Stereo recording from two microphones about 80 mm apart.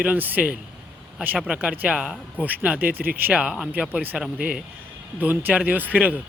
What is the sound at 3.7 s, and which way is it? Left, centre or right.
A man's voice, centre.